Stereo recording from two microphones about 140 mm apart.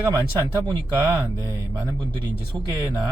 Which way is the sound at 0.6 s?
20° right (ahead or behind).